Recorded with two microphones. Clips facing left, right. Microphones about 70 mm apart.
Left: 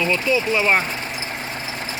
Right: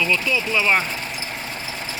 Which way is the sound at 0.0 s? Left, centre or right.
Left.